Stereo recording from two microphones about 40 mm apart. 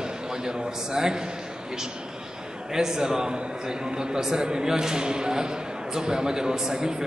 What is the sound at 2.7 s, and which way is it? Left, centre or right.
A man's voice, centre.